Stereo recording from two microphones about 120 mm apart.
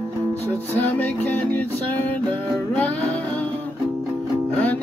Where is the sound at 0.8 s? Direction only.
15° left (ahead or behind).